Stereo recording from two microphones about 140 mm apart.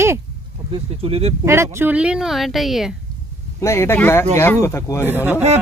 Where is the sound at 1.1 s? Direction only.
45° right (ahead or behind).